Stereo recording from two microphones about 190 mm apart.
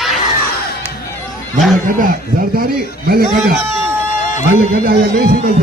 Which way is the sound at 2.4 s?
50° right (ahead or behind).